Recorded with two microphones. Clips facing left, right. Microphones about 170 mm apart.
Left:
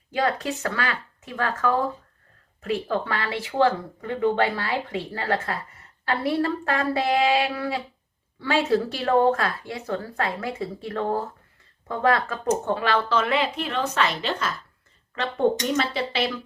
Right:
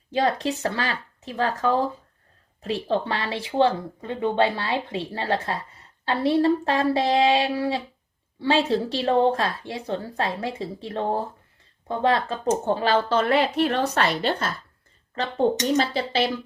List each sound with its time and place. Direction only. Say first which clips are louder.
0.1 s speech: right 2 dB; 25° right (ahead or behind)